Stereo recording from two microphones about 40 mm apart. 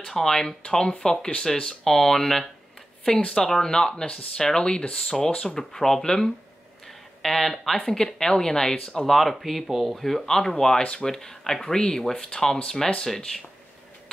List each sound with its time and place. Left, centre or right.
0.0 s speech: centre
9.1 s speech: centre
10.8 s speech: left
11.1 s speech: centre